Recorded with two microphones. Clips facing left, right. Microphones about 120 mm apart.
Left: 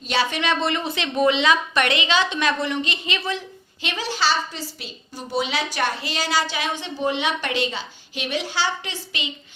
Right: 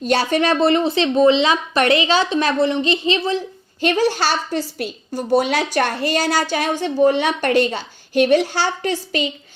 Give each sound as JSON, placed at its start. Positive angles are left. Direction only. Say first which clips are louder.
{"t": 0.0, "sound": "speech", "louder": "right 6 dB", "side_deg": -45}
{"t": 3.8, "sound": "a woman's voice", "louder": "right 9 dB", "side_deg": -45}